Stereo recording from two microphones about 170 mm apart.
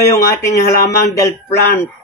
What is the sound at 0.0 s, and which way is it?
Speech, 20° left (ahead or behind).